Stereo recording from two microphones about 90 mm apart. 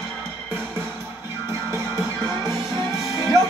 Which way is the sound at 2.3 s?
40° left (ahead or behind).